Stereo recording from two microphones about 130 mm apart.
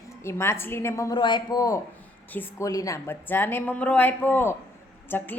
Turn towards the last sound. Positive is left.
turn(degrees=15)  # may be behind; listen again after turning